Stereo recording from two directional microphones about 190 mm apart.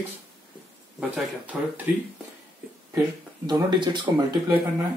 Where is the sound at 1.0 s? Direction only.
5° right (ahead or behind).